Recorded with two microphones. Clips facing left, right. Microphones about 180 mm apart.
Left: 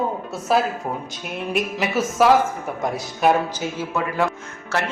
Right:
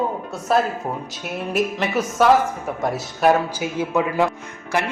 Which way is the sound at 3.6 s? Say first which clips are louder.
Right 4 dB; 15° right (ahead or behind).